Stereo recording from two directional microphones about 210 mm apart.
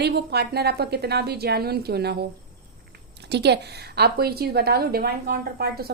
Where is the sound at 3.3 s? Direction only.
55° right (ahead or behind).